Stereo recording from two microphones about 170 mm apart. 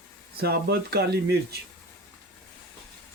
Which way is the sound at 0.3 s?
70° right (ahead or behind).